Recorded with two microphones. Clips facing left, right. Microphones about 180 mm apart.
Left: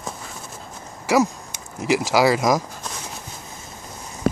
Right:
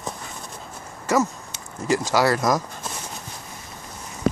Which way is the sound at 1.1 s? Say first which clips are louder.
Left 3 dB; 10° left (ahead or behind).